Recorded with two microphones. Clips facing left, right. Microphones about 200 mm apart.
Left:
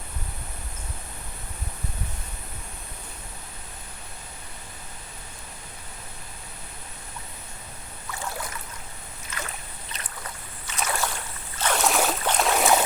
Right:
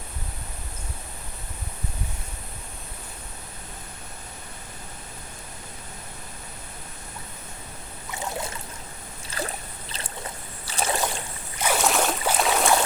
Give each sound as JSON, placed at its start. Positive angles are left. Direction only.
{"t": 8.1, "sound": "boat", "side_deg": -20}
{"t": 9.3, "sound": "boat", "side_deg": -30}
{"t": 11.5, "sound": "boat", "side_deg": -10}